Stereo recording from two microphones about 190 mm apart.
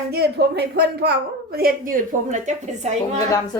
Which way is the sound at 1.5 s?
50° right (ahead or behind).